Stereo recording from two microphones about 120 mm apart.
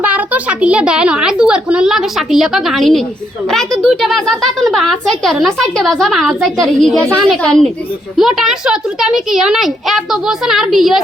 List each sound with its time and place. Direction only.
0.0 s a child's voice: 10° right (ahead or behind)